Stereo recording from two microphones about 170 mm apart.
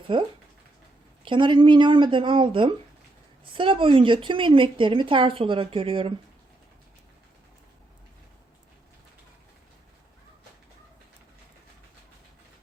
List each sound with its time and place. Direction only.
0.1 s a woman's voice: 30° right (ahead or behind)